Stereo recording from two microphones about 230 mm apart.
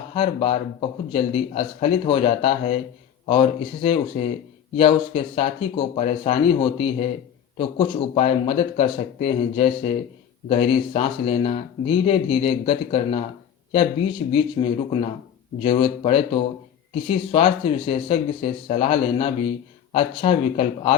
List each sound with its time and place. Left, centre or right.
0.1 s speech: left
14.3 s speech: left